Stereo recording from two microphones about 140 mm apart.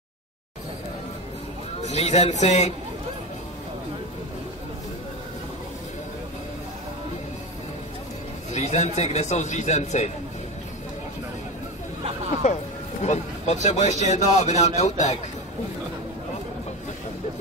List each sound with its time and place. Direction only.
1.8 s speech: 55° left (ahead or behind)
8.5 s speech: 55° left (ahead or behind)
12.4 s speech: 55° left (ahead or behind)